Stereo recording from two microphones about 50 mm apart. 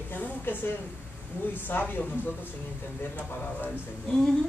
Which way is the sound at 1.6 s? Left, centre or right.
Left.